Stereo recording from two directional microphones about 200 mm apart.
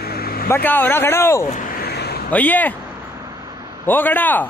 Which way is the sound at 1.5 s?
45° left (ahead or behind).